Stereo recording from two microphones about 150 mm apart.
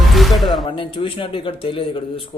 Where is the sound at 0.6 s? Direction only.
35° left (ahead or behind).